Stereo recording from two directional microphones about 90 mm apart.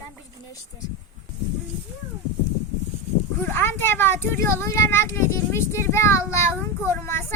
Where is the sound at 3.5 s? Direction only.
25° left (ahead or behind).